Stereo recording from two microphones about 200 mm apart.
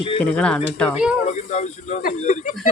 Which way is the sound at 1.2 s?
35° left (ahead or behind).